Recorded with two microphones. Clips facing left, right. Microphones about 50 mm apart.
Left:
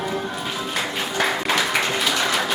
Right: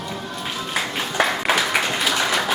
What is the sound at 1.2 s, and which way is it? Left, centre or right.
Applause, centre.